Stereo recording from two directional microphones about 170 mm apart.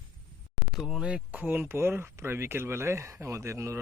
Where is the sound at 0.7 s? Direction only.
5° right (ahead or behind).